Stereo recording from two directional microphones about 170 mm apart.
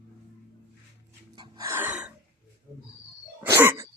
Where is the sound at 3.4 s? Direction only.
15° right (ahead or behind).